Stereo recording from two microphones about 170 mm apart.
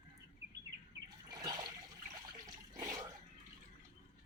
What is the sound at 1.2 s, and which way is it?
Water, 25° right (ahead or behind).